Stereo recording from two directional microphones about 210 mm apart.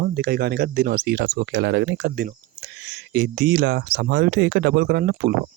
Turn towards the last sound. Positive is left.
turn(degrees=-50)  # may be behind; listen again after turning